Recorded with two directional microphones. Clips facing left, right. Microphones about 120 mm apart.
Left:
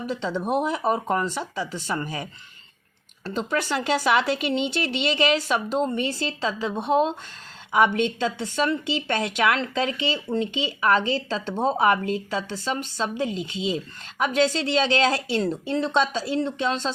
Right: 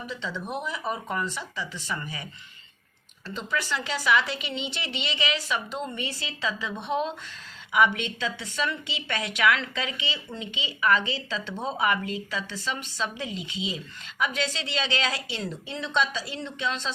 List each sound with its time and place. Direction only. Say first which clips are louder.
0.1 s speech: left 9 dB; 45° left (ahead or behind)
3.3 s a woman's voice: left 5 dB; 45° left (ahead or behind)